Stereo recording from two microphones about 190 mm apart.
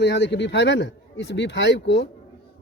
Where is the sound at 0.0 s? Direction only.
65° left (ahead or behind).